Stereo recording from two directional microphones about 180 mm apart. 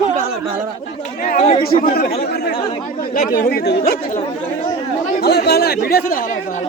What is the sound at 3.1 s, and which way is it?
Speech, 55° left (ahead or behind).